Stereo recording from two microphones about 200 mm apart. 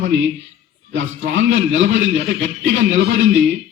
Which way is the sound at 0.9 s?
70° right (ahead or behind).